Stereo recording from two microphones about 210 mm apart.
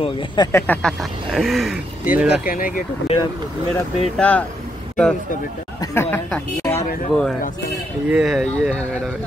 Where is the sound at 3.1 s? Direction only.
30° left (ahead or behind).